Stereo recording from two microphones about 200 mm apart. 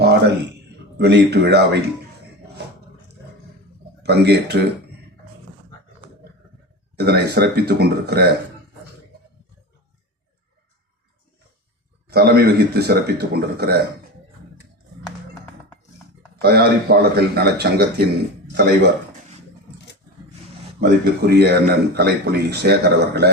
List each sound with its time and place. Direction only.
0.9 s speech: 55° right (ahead or behind)
4.0 s speech: 55° right (ahead or behind)
6.9 s speech: 55° right (ahead or behind)
12.0 s speech: 50° right (ahead or behind)
16.4 s speech: 55° right (ahead or behind)
21.0 s speech: 55° right (ahead or behind)